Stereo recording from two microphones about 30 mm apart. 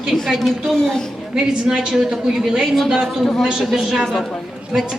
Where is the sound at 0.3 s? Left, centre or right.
Centre.